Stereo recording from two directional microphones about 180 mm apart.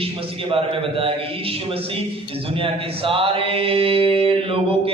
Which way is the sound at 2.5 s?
30° right (ahead or behind).